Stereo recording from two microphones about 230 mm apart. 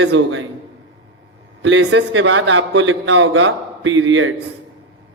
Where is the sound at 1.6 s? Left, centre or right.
Right.